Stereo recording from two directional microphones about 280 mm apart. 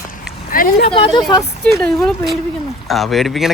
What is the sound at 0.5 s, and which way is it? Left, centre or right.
Speech, left.